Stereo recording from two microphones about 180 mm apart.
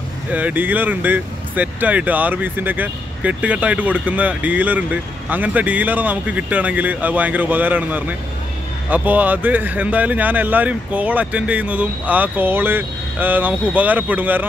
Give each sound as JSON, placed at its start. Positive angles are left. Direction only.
{"t": 0.3, "sound": "speech", "side_deg": -10}